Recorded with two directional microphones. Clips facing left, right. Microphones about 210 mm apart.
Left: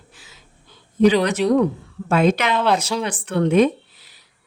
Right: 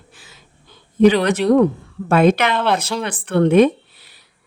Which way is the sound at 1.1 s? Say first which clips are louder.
Right 2 dB; 60° right (ahead or behind).